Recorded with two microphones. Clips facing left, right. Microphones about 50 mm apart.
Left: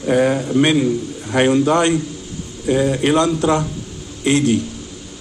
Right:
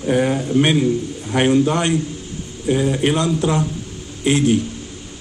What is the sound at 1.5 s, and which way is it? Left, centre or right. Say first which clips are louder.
Speech: even; left.